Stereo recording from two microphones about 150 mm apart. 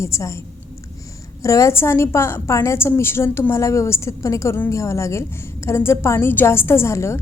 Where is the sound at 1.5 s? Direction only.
20° left (ahead or behind).